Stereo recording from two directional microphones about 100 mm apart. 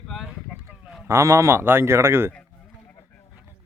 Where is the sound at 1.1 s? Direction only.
30° right (ahead or behind).